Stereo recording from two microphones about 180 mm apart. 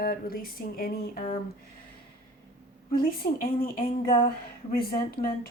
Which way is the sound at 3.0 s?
55° left (ahead or behind).